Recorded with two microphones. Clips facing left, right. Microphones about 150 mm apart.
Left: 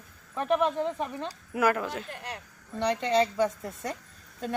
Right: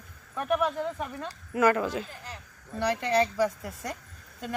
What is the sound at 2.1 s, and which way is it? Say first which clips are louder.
Speech: left 4 dB; 65° left (ahead or behind).